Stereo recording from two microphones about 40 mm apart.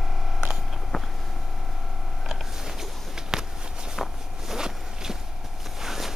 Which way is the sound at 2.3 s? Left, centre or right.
Centre.